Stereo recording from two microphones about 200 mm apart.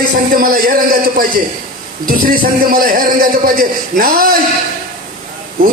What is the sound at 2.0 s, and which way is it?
A man's voice, 45° right (ahead or behind).